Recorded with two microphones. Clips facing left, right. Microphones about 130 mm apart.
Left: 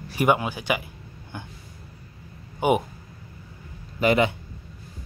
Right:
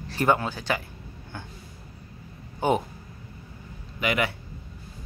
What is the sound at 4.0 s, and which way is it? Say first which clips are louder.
Speech: left 6 dB; 35° left (ahead or behind).